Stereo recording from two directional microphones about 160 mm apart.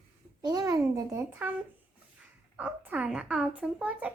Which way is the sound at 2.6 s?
10° right (ahead or behind).